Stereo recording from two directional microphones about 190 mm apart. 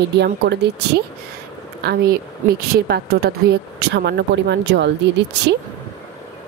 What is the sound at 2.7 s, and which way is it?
Speech, 55° right (ahead or behind).